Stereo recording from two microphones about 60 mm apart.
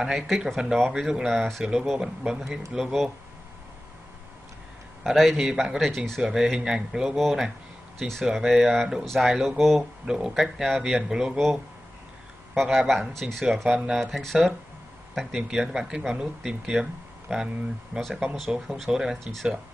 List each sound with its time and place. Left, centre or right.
0.0 s speech: centre
5.0 s speech: centre
10.0 s speech: centre
11.3 s speech: centre
18.9 s speech: centre